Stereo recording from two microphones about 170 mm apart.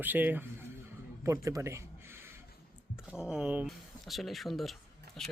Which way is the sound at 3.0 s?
5° right (ahead or behind).